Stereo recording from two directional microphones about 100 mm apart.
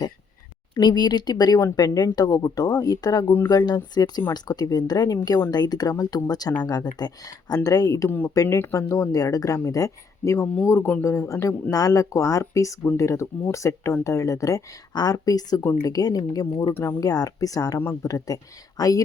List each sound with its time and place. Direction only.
0.7 s speech: 50° left (ahead or behind)
3.3 s a man's voice: 25° left (ahead or behind)
3.9 s a man's voice: 45° left (ahead or behind)
16.7 s a man's voice: 20° left (ahead or behind)
17.0 s speech: 40° left (ahead or behind)